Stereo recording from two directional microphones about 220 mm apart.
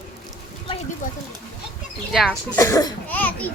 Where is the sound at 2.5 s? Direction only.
15° left (ahead or behind).